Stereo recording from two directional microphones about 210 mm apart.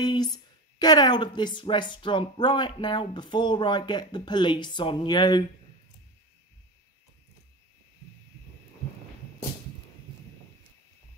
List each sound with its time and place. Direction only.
0.0 s speech: 20° left (ahead or behind)